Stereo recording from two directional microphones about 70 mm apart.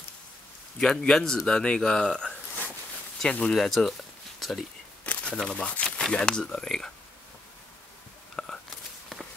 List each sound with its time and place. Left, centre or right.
0.7 s speech: centre
3.5 s speech: centre
5.0 s crumpling: centre
5.3 s speech: centre
8.4 s whispering: centre